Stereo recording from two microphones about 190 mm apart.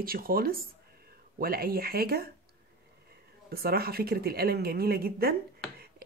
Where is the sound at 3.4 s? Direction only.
55° right (ahead or behind).